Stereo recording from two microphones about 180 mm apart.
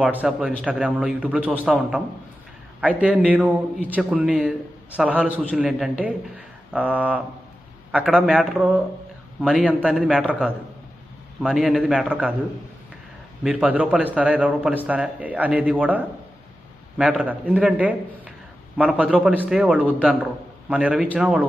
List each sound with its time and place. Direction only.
0.0 s a man's voice: 5° right (ahead or behind)
13.4 s a man's voice: 5° right (ahead or behind)